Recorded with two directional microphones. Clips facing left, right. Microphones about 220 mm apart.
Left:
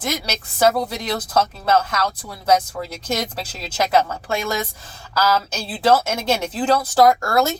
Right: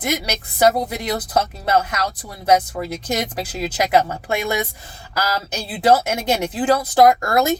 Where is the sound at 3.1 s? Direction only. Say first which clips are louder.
Even; 15° right (ahead or behind).